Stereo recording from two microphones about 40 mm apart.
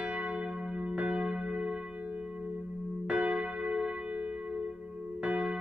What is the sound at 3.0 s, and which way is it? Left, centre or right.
Church bell, right.